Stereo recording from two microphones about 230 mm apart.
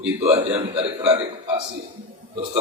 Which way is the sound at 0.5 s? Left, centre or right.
Right.